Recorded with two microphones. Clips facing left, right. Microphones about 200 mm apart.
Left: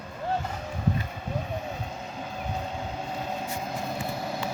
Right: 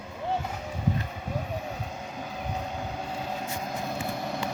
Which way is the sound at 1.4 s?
5° right (ahead or behind).